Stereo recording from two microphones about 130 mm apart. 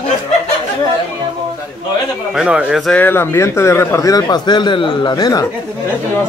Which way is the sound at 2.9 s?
15° left (ahead or behind).